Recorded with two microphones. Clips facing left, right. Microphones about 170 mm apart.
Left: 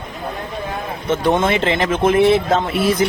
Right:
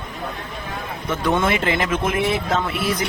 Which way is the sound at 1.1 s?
25° left (ahead or behind).